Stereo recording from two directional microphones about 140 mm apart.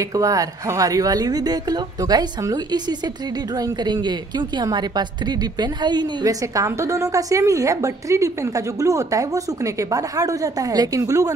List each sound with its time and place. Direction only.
0.0 s a woman's voice: 25° right (ahead or behind)